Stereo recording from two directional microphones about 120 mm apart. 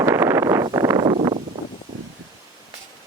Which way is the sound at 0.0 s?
20° right (ahead or behind).